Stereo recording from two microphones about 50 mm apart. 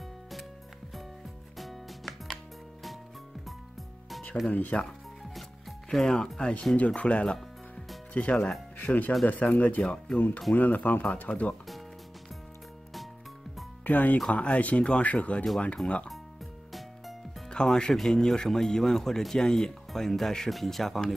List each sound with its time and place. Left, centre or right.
1.6 s music: centre
4.5 s speech: left
5.9 s speech: centre
6.8 s speech: left
13.8 s speech: left
17.5 s speech: centre